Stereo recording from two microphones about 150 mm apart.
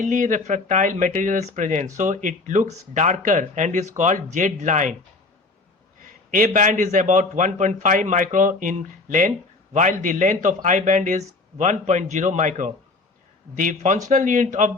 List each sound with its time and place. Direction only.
0.0 s speech: 55° right (ahead or behind)
6.3 s speech: 60° right (ahead or behind)